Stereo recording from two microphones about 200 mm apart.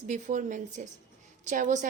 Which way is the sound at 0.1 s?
40° right (ahead or behind).